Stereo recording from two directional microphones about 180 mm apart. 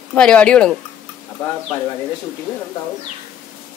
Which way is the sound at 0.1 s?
5° left (ahead or behind).